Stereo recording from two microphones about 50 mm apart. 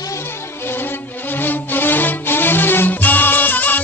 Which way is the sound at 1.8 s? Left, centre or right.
Left.